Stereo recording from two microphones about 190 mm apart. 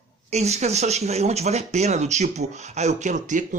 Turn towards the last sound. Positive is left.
turn(degrees=-40)  # may be behind; listen again after turning